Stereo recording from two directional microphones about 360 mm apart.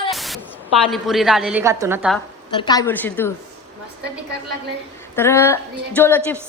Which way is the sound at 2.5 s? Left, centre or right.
Centre.